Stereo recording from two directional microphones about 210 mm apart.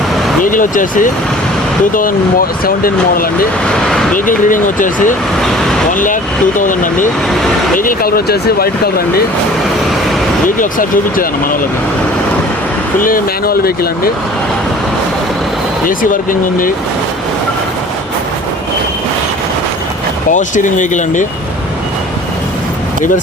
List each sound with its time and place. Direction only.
0.4 s speech: 40° left (ahead or behind)
2.6 s speech: 45° left (ahead or behind)
3.7 s speech: centre (ahead or behind)
4.1 s speech: 40° left (ahead or behind)
6.6 s speech: 40° left (ahead or behind)
10.6 s speech: 40° left (ahead or behind)
13.0 s speech: 40° left (ahead or behind)
15.9 s speech: 40° left (ahead or behind)
20.3 s speech: 35° left (ahead or behind)